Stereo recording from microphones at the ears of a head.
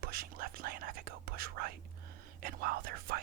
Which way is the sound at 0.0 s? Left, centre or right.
Right.